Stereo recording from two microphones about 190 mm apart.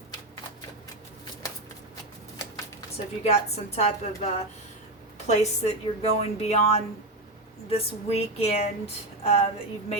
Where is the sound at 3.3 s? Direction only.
35° left (ahead or behind).